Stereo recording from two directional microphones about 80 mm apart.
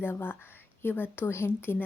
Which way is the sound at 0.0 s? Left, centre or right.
Left.